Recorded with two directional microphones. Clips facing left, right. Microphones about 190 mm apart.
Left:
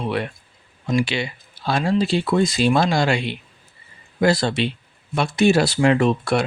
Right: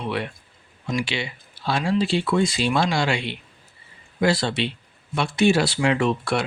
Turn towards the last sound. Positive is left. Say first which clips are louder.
# left 4 dB
turn(degrees=40)  # may be behind; listen again after turning